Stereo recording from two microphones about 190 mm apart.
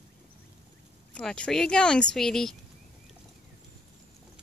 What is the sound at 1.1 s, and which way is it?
Speech, 5° left (ahead or behind).